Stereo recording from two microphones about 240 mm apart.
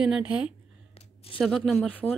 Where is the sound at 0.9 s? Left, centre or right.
Left.